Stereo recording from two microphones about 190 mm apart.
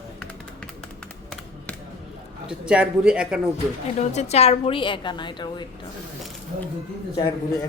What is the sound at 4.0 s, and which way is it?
A woman's voice, 35° left (ahead or behind).